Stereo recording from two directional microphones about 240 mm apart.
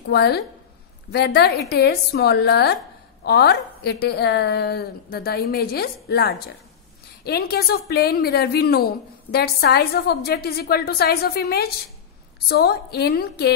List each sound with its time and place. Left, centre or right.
0.1 s a woman's voice: left